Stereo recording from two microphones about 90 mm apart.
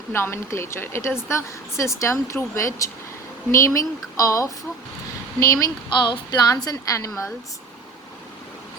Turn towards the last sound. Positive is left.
turn(degrees=40)  # may be behind; listen again after turning